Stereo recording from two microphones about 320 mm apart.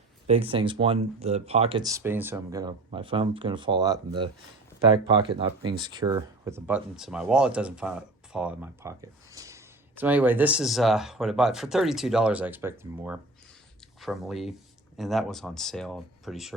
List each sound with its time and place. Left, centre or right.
0.3 s speech: centre